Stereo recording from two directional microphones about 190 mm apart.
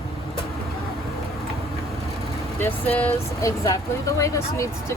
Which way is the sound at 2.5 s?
10° left (ahead or behind).